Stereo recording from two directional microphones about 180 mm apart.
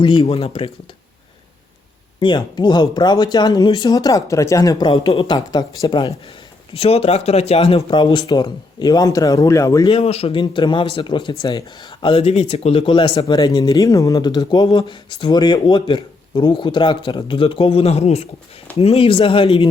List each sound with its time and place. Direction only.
0.0 s speech: 30° left (ahead or behind)
2.2 s speech: 25° left (ahead or behind)
9.9 s speech: 35° left (ahead or behind)